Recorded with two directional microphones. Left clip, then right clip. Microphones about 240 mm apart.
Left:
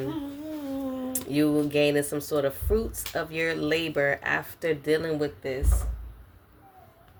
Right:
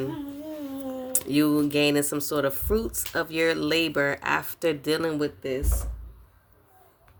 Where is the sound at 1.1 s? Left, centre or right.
Right.